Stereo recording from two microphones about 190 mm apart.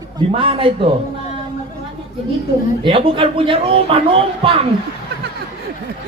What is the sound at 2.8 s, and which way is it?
Speech, 25° right (ahead or behind).